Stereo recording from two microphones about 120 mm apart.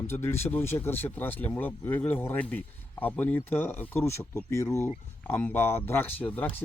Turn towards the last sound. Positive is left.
turn(degrees=15)  # may be behind; listen again after turning